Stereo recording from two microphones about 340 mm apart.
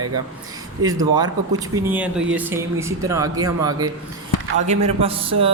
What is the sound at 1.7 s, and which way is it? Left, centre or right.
Speech, centre.